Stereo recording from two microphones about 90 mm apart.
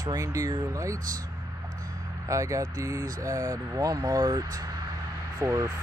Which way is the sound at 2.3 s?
35° right (ahead or behind).